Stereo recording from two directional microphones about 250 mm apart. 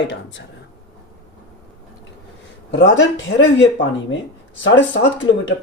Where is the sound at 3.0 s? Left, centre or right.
Left.